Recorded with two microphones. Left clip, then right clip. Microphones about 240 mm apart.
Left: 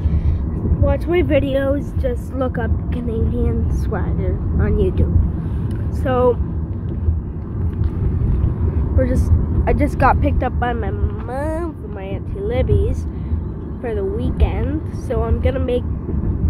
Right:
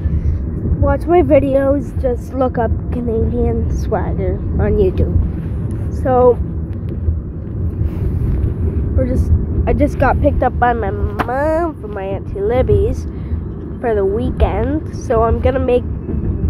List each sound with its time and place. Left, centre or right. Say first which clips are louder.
0.8 s a woman's voice: right 6 dB; centre
6.0 s a woman's voice: right 5 dB; centre
8.9 s speech: even; centre
10.4 s a woman's voice: right 7 dB; centre